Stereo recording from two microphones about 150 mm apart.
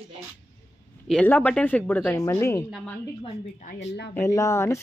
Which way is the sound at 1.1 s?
10° left (ahead or behind).